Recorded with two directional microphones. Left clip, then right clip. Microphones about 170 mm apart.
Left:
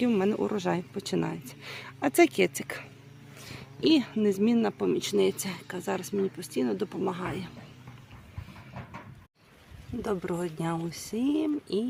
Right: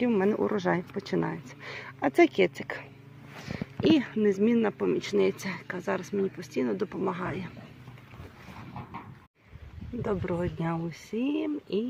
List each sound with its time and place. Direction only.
0.0 s speech: 20° left (ahead or behind)
0.3 s speech: 5° left (ahead or behind)
10.0 s speech: centre (ahead or behind)